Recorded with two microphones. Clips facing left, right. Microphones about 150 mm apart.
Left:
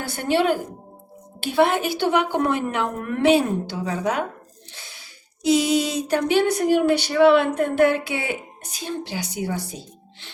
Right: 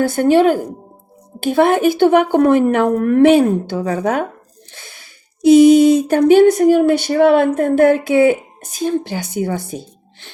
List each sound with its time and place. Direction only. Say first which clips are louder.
0.0 s a woman's voice: right 9 dB; 45° right (ahead or behind)